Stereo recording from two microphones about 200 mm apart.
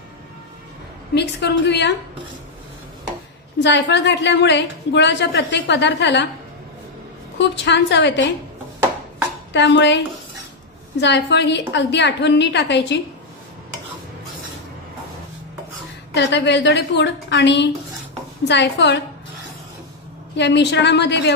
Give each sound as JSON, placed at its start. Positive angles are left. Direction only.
{"t": 1.1, "sound": "a woman's voice", "side_deg": 60}
{"t": 3.5, "sound": "a woman's voice", "side_deg": 60}
{"t": 7.3, "sound": "a woman's voice", "side_deg": 60}
{"t": 9.5, "sound": "a woman's voice", "side_deg": 60}
{"t": 16.2, "sound": "a woman's voice", "side_deg": 60}
{"t": 20.3, "sound": "a woman's voice", "side_deg": 60}